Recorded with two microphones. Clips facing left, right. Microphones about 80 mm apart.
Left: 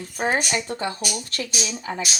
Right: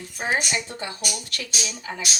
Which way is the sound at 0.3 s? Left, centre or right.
Left.